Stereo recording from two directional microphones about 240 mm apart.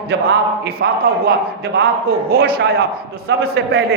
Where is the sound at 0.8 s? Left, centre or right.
Right.